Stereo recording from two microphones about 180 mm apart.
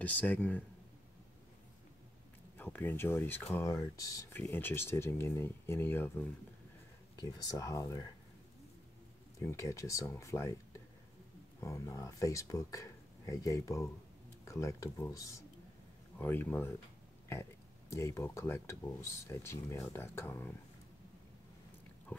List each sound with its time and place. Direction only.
0.0 s speech: 10° left (ahead or behind)
2.5 s speech: 10° left (ahead or behind)
7.2 s speech: 20° left (ahead or behind)
9.4 s speech: 15° left (ahead or behind)